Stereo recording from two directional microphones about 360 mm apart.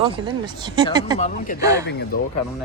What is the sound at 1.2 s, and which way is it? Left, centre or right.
Speech, centre.